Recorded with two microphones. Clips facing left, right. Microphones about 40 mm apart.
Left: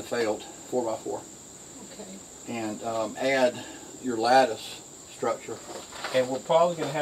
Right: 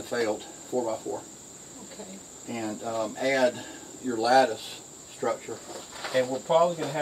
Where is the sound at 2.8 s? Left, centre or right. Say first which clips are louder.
Left 1 dB; centre.